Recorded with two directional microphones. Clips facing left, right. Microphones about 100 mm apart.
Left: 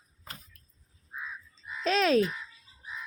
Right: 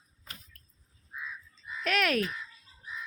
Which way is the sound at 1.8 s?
25° left (ahead or behind).